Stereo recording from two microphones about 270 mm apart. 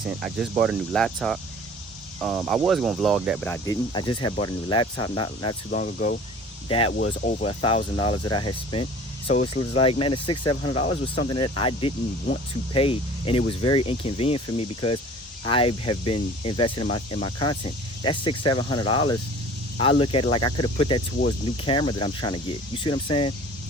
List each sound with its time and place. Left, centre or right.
0.0 s speech: centre
3.5 s speech: centre
5.7 s speech: left